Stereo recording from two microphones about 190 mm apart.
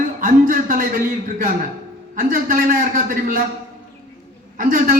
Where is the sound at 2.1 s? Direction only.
45° right (ahead or behind).